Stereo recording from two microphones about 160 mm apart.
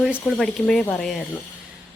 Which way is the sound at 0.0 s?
Centre (ahead or behind).